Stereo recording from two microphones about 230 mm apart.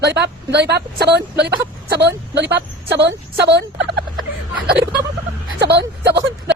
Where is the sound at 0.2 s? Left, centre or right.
Right.